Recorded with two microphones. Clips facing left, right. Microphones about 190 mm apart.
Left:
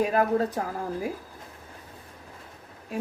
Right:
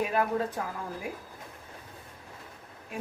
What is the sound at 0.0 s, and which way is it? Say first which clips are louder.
Speech: left 5 dB; 40° left (ahead or behind).